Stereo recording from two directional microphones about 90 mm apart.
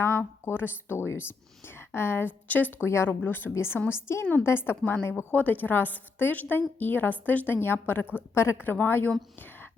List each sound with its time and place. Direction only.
0.0 s speech: 30° left (ahead or behind)